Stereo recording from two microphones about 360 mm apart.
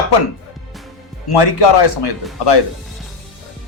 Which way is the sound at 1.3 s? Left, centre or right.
Left.